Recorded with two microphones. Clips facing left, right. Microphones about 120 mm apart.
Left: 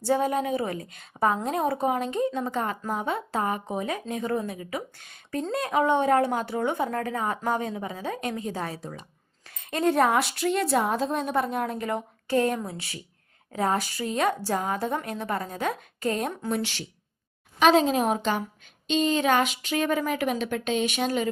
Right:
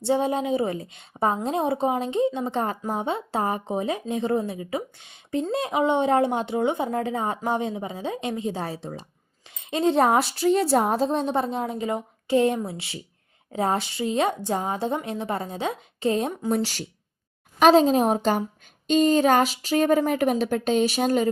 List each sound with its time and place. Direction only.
0.0 s speech: 25° right (ahead or behind)
16.6 s a woman's voice: 40° right (ahead or behind)